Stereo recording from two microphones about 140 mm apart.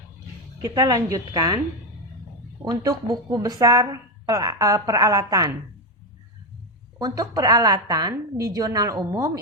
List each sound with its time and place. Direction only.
0.6 s a woman's voice: 25° right (ahead or behind)
2.6 s a woman's voice: 25° right (ahead or behind)
7.0 s a woman's voice: 25° right (ahead or behind)